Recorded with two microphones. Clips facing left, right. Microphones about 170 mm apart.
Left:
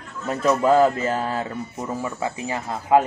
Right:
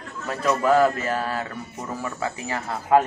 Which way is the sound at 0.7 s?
20° left (ahead or behind).